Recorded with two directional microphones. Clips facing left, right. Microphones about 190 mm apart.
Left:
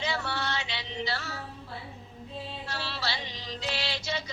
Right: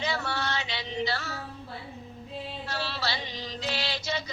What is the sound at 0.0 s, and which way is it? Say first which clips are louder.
Music: right 1 dB; 45° right (ahead or behind).